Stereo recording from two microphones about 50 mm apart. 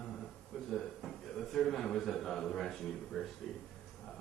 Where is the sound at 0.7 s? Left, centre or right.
Centre.